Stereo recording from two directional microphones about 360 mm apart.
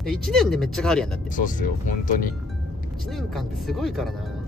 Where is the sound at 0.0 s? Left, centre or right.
Centre.